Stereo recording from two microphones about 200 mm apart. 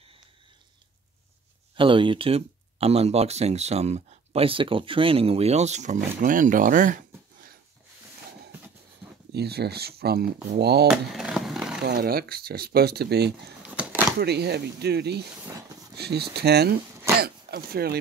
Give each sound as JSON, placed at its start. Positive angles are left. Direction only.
{"t": 1.8, "sound": "speech", "side_deg": -25}
{"t": 9.3, "sound": "speech", "side_deg": -55}
{"t": 10.9, "sound": "a sound", "side_deg": 0}
{"t": 11.8, "sound": "speech", "side_deg": -50}
{"t": 13.6, "sound": "a sound", "side_deg": -5}
{"t": 14.2, "sound": "speech", "side_deg": -55}